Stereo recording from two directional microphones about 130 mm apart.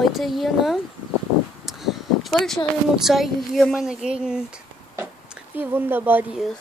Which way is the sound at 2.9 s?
Centre (ahead or behind).